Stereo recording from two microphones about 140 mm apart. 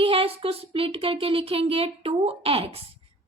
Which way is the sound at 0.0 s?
40° right (ahead or behind).